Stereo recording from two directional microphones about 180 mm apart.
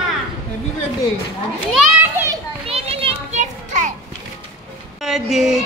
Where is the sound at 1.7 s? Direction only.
10° right (ahead or behind).